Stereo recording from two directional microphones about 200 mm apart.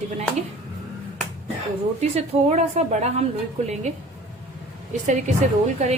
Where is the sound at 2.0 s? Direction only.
35° right (ahead or behind).